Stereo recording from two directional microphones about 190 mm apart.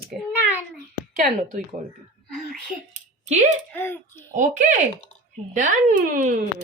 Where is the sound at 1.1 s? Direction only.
45° right (ahead or behind).